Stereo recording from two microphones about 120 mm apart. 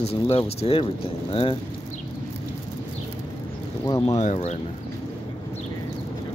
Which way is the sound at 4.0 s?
75° left (ahead or behind).